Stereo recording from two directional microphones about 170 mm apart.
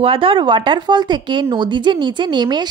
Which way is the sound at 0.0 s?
30° right (ahead or behind).